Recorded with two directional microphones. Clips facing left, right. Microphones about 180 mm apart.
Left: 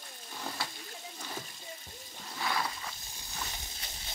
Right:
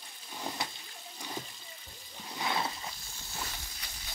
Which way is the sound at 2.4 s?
25° right (ahead or behind).